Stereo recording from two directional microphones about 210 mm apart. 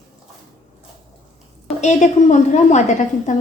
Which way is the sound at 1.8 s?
35° left (ahead or behind).